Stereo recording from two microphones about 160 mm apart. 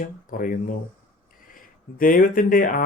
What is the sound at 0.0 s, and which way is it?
Speech, 60° left (ahead or behind).